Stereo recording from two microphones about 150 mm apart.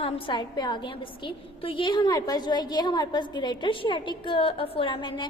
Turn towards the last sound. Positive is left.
turn(degrees=30)  # may be behind; listen again after turning